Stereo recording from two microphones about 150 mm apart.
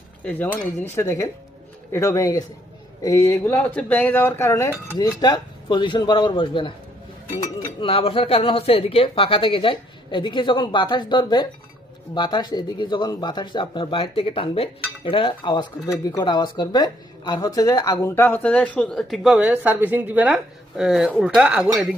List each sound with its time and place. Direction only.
0.2 s speech: 10° left (ahead or behind); by 6.7 s 35° left (ahead or behind)
7.8 s speech: 35° left (ahead or behind); by 21.6 s 5° right (ahead or behind)